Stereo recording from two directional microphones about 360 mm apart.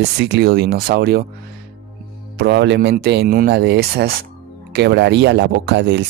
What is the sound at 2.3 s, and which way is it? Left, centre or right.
Speech, right.